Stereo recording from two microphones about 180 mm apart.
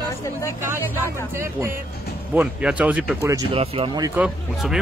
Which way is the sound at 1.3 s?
15° right (ahead or behind).